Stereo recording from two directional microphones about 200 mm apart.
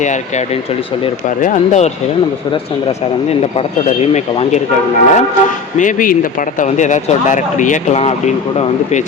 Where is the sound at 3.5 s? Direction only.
30° left (ahead or behind).